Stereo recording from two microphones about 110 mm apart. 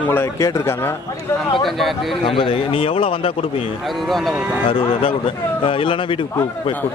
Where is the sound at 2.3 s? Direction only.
55° left (ahead or behind).